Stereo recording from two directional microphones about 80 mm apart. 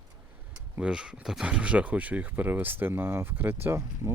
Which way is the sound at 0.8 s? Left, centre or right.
Centre.